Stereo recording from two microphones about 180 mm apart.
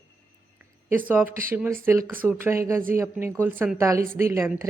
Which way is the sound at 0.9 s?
10° right (ahead or behind).